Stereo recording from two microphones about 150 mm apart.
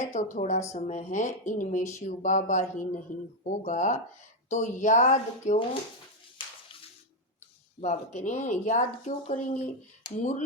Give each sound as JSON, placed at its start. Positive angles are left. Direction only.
{"t": 0.1, "sound": "speech", "side_deg": 55}
{"t": 7.8, "sound": "speech", "side_deg": 50}